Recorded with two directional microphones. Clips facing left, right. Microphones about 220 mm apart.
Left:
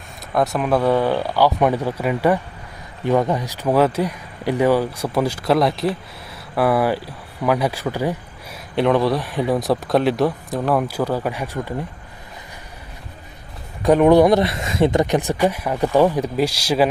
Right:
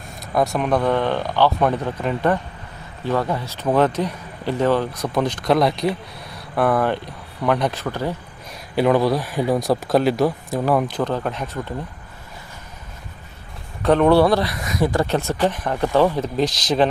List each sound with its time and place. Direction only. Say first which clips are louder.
0.3 s speech: left 1 dB; centre (ahead or behind)
8.7 s speech: even; 5° right (ahead or behind)
13.8 s speech: left 2 dB; 10° left (ahead or behind)
15.0 s speech: left 2 dB; 15° left (ahead or behind)